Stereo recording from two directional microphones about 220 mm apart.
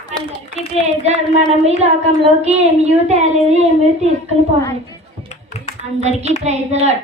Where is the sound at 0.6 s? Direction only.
30° right (ahead or behind).